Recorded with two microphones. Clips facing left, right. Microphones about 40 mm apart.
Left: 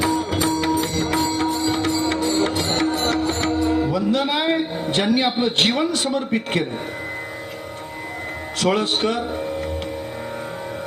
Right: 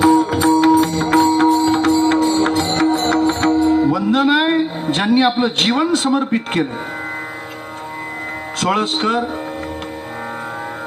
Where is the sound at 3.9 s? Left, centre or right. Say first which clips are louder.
Right 6 dB; right.